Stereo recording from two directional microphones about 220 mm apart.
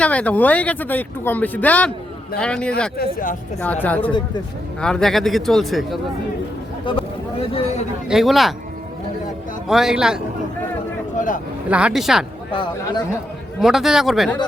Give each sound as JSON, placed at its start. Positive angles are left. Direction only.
{"t": 0.0, "sound": "a man's voice", "side_deg": 5}
{"t": 3.0, "sound": "speech", "side_deg": 40}
{"t": 3.6, "sound": "a man's voice", "side_deg": 5}
{"t": 6.9, "sound": "speech", "side_deg": 20}
{"t": 8.0, "sound": "a man's voice", "side_deg": 0}
{"t": 9.6, "sound": "a man's voice", "side_deg": 0}
{"t": 11.7, "sound": "a man's voice", "side_deg": -5}
{"t": 12.5, "sound": "speech", "side_deg": 25}
{"t": 13.6, "sound": "a man's voice", "side_deg": 0}